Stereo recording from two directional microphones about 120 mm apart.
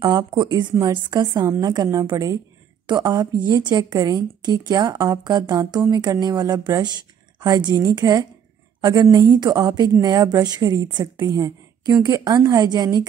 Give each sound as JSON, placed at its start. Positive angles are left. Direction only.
{"t": 0.0, "sound": "a woman's voice", "side_deg": -40}